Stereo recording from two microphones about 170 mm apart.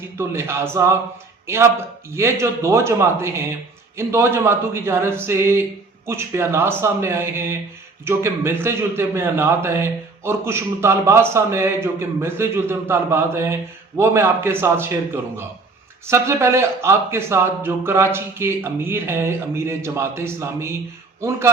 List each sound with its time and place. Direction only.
0.2 s a man's voice: 15° right (ahead or behind)
2.1 s a man's voice: 15° right (ahead or behind)